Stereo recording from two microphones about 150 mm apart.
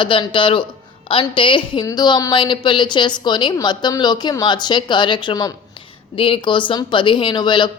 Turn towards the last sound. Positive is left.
turn(degrees=30)  # may be behind; listen again after turning